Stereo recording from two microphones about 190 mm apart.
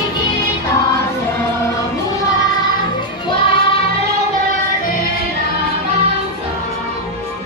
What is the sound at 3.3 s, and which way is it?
Music, 25° left (ahead or behind).